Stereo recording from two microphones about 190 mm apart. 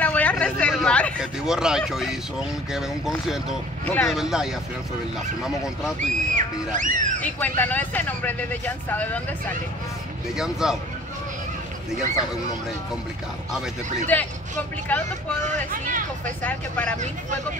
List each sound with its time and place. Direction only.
0.0 s a sound: 5° left (ahead or behind)
1.2 s speech: 5° right (ahead or behind)
3.8 s speech: 10° left (ahead or behind)
4.1 s speech: 5° right (ahead or behind)
5.9 s speech: 45° right (ahead or behind)
7.2 s speech: 10° left (ahead or behind)
10.3 s speech: 5° right (ahead or behind)
14.1 s speech: 10° left (ahead or behind)
15.4 s speech: 40° right (ahead or behind)
16.4 s speech: 10° left (ahead or behind)